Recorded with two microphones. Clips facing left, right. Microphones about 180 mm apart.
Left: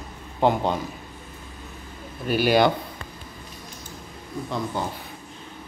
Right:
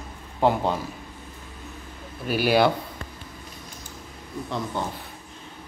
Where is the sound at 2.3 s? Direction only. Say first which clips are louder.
Left 1 dB; 5° right (ahead or behind).